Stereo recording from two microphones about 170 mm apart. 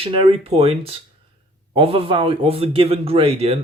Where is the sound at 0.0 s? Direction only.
30° right (ahead or behind).